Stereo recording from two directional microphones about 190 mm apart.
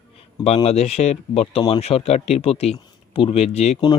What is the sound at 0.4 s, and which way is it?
Speech, 30° left (ahead or behind).